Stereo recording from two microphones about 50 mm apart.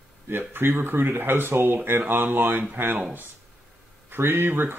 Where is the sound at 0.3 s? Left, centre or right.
Right.